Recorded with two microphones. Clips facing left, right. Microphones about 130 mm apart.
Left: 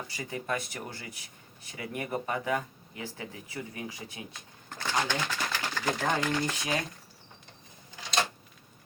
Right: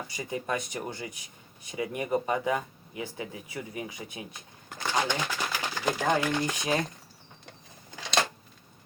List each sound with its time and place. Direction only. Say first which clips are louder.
0.1 s speech: right 2 dB; 20° right (ahead or behind)